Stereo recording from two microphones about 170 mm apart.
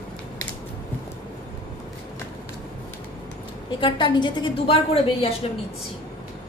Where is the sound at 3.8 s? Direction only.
25° left (ahead or behind).